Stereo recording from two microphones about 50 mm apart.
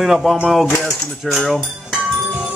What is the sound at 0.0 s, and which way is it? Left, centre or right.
Mantra, centre.